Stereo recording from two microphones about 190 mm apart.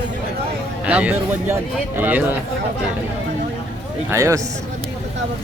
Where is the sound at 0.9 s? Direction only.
5° right (ahead or behind).